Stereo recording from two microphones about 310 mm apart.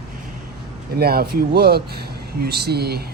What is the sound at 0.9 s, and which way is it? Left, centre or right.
Speech, right.